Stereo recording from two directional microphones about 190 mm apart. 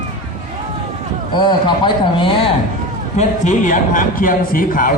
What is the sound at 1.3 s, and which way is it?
A man's voice, 25° left (ahead or behind).